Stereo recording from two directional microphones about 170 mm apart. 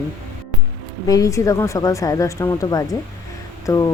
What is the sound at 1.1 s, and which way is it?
Speech, 20° left (ahead or behind).